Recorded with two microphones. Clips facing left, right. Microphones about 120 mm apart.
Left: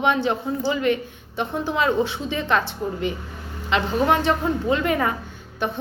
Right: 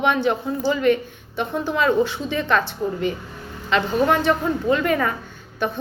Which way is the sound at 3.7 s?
20° left (ahead or behind).